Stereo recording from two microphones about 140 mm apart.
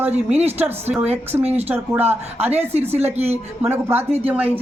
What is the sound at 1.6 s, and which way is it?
Speech, 15° right (ahead or behind).